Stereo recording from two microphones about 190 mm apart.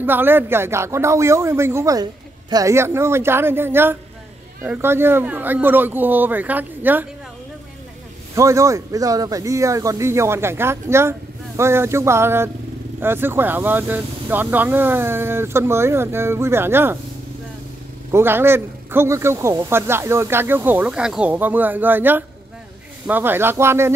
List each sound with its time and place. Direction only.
0.0 s speech: 10° right (ahead or behind)
8.4 s speech: 15° right (ahead or behind)
18.1 s speech: 10° right (ahead or behind)